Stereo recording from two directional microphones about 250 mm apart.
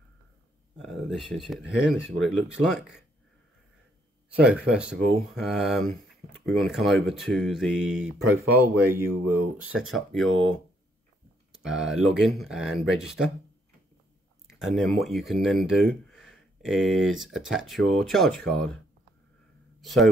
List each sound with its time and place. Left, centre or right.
0.7 s speech: centre
4.4 s speech: centre
9.2 s speech: right
9.8 s speech: centre
14.5 s speech: centre
19.8 s speech: centre